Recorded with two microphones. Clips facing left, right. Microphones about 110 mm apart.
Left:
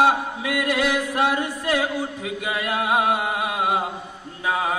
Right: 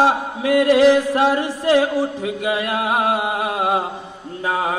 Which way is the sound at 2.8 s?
35° right (ahead or behind).